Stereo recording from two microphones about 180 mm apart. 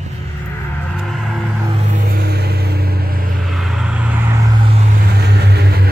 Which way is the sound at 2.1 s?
60° right (ahead or behind).